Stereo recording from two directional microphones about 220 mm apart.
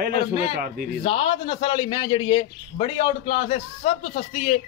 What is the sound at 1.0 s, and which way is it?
A man's voice, 25° left (ahead or behind).